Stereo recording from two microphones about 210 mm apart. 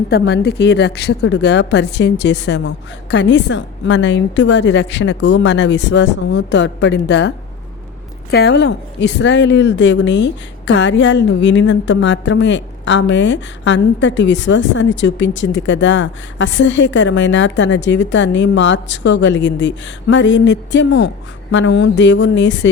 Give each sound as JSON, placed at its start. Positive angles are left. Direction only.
{"t": 0.1, "sound": "a woman's voice", "side_deg": 50}